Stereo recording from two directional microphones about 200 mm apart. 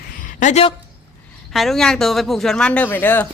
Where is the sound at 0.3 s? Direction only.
35° left (ahead or behind).